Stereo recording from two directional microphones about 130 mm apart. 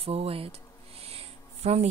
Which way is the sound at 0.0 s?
50° right (ahead or behind).